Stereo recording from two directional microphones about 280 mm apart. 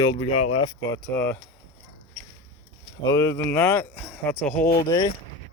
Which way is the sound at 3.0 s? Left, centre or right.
Centre.